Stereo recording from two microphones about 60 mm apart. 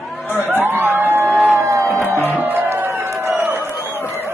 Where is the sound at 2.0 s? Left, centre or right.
Right.